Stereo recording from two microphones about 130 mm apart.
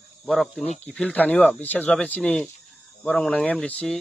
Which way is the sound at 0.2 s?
Centre (ahead or behind).